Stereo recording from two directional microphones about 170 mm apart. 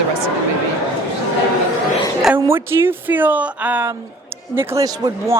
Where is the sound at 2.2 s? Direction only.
10° right (ahead or behind).